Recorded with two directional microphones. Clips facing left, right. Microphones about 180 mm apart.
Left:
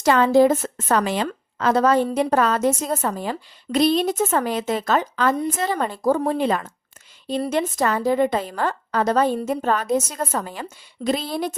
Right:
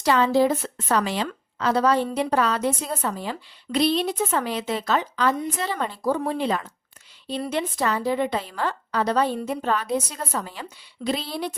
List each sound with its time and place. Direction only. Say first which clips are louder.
0.0 s a woman's voice: left 4 dB; 50° left (ahead or behind)